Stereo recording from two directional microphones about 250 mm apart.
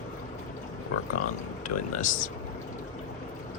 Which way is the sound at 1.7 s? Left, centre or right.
Left.